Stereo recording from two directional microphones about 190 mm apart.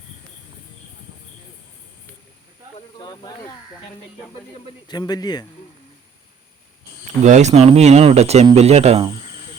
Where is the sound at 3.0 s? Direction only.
20° left (ahead or behind).